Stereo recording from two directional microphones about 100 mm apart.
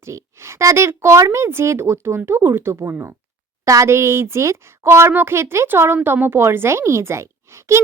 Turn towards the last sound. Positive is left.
turn(degrees=-30)  # may be behind; listen again after turning